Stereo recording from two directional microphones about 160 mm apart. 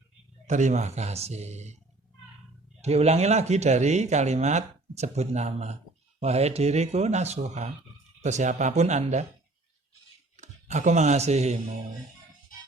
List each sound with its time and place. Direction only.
0.4 s speech: 50° right (ahead or behind)
2.8 s speech: 40° right (ahead or behind)
10.3 s speech: 50° right (ahead or behind)